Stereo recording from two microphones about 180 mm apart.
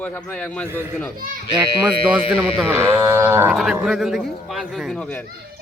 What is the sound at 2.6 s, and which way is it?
Cattle, 15° right (ahead or behind).